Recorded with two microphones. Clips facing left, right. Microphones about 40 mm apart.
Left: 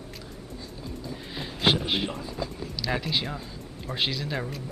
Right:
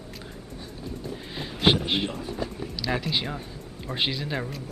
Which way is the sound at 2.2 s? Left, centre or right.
Right.